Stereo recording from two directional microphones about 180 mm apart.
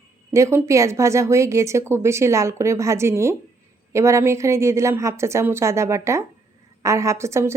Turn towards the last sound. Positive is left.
turn(degrees=-15)  # may be behind; listen again after turning